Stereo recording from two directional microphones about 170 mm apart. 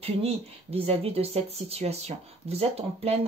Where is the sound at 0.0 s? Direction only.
35° right (ahead or behind).